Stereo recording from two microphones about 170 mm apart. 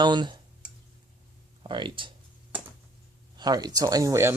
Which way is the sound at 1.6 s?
30° right (ahead or behind).